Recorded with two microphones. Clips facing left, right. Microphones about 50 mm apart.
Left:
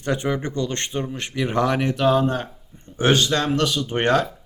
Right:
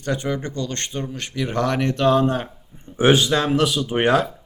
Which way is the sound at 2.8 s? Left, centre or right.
Centre.